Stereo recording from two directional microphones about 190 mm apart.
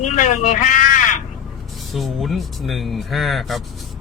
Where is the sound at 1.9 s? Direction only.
Centre (ahead or behind).